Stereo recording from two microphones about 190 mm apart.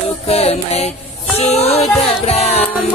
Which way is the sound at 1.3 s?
35° left (ahead or behind).